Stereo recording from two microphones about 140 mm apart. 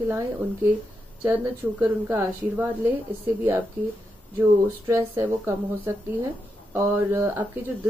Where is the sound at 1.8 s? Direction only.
10° right (ahead or behind).